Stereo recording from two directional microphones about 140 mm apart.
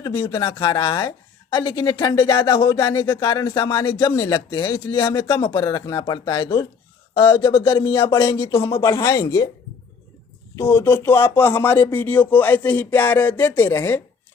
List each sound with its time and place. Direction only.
0.0 s a woman's voice: 30° left (ahead or behind)
10.5 s speech: 20° left (ahead or behind)